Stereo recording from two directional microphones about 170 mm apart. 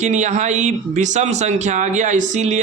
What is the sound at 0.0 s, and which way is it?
Speech, 45° right (ahead or behind).